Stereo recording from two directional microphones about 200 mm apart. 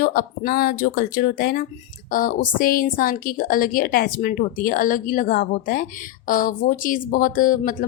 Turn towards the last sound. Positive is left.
turn(degrees=45)  # may be behind; listen again after turning